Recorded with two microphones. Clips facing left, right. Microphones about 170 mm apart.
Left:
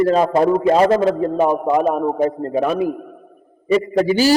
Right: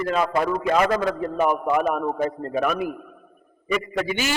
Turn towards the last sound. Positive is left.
turn(degrees=35)  # may be behind; listen again after turning